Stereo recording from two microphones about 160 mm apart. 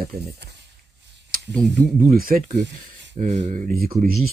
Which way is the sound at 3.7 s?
65° right (ahead or behind).